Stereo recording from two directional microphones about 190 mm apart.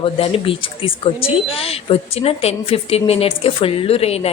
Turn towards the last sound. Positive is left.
turn(degrees=30)  # may be behind; listen again after turning